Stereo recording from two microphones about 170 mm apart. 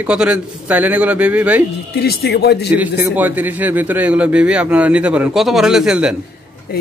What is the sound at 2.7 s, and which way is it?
A man's voice, 10° right (ahead or behind).